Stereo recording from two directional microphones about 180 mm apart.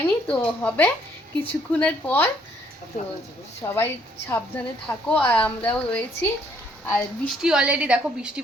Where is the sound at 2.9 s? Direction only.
35° left (ahead or behind).